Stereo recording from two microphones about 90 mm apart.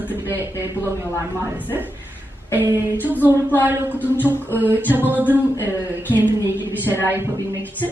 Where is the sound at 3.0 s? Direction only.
20° right (ahead or behind).